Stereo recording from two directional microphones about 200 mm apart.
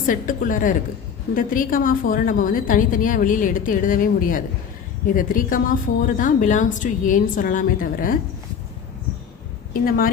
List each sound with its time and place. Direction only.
0.0 s a woman's voice: 40° left (ahead or behind)
9.8 s a woman's voice: 45° left (ahead or behind)